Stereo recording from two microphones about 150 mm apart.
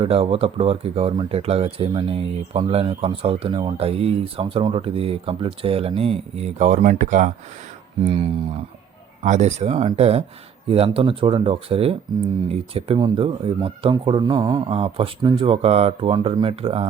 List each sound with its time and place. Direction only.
0.0 s speech: 40° right (ahead or behind); by 7.3 s 60° right (ahead or behind)
8.0 s speech: 35° right (ahead or behind)
9.2 s speech: 50° right (ahead or behind); by 14.6 s 30° right (ahead or behind)
14.7 s speech: 40° right (ahead or behind)